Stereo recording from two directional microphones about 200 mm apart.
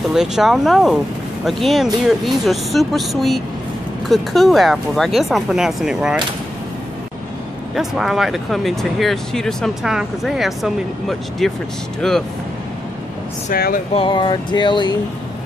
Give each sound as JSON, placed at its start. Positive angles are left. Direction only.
{"t": 0.1, "sound": "speech", "side_deg": 0}
{"t": 7.7, "sound": "speech", "side_deg": 0}
{"t": 13.5, "sound": "speech", "side_deg": 45}
{"t": 13.9, "sound": "speech", "side_deg": 25}